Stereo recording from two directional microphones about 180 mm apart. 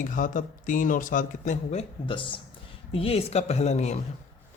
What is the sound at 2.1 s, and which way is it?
Speech, 30° left (ahead or behind).